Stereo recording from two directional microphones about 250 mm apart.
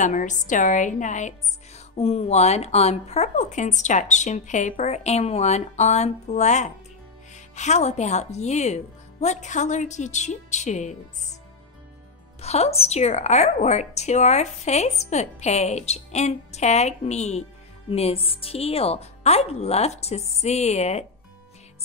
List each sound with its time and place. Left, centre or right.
0.0 s a woman's voice: left
12.4 s a woman's voice: left